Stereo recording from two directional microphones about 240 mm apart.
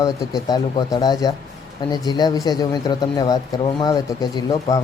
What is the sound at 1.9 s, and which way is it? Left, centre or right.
Speech, centre.